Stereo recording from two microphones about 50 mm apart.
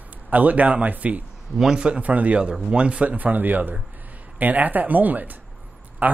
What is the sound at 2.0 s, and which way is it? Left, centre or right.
Speech, right.